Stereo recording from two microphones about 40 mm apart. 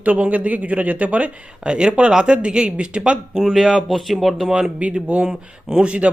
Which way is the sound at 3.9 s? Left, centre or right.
Centre.